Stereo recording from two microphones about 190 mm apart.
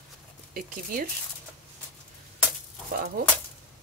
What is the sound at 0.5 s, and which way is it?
Speech, 50° right (ahead or behind).